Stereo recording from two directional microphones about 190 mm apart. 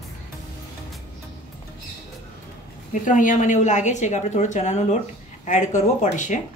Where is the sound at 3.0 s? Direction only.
45° left (ahead or behind).